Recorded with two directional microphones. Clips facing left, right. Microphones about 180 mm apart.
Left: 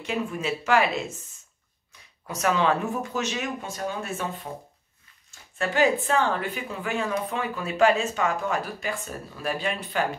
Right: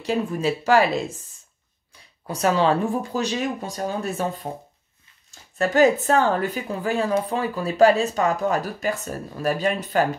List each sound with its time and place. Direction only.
0.0 s speech: 35° right (ahead or behind)
2.2 s speech: 30° right (ahead or behind)